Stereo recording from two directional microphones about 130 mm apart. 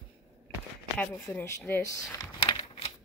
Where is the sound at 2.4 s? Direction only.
45° left (ahead or behind).